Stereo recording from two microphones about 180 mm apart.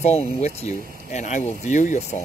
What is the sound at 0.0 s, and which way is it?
Speech, 35° left (ahead or behind).